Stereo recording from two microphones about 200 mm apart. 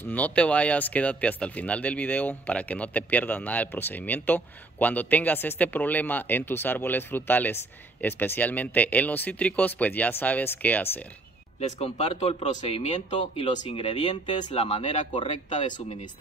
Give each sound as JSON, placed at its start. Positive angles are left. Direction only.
{"t": 0.1, "sound": "speech", "side_deg": 5}
{"t": 11.8, "sound": "speech", "side_deg": 30}